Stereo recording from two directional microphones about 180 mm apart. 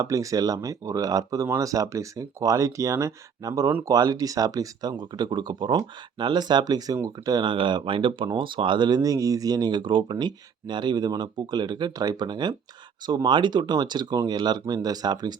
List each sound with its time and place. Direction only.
0.0 s speech: 20° right (ahead or behind)